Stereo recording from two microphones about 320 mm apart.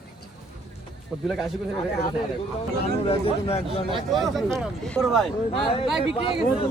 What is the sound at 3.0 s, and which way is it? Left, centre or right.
Speech, centre.